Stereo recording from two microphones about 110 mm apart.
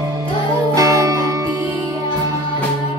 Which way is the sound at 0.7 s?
35° right (ahead or behind).